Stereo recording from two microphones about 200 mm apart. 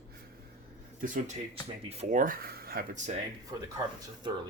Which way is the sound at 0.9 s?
40° right (ahead or behind).